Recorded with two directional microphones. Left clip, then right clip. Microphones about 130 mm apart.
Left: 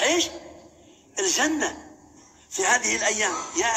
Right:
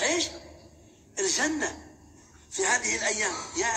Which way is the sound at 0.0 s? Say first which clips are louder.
Left 5 dB; 40° left (ahead or behind).